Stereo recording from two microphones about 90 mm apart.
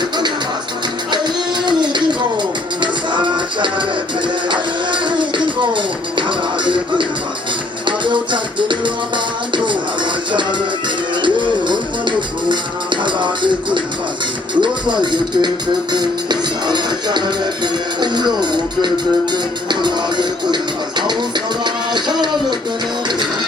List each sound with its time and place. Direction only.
1.6 s a sound: 60° right (ahead or behind)
2.8 s music: 60° right (ahead or behind)
11.2 s music: 60° right (ahead or behind)